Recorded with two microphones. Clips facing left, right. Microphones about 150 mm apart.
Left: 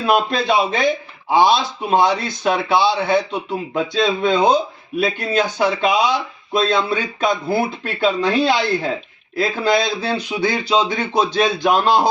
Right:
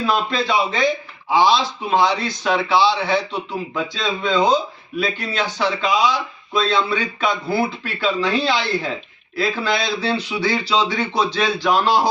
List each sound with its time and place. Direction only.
0.1 s a man's voice: 55° left (ahead or behind)